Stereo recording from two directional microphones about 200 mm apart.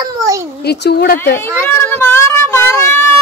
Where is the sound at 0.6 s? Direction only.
55° left (ahead or behind).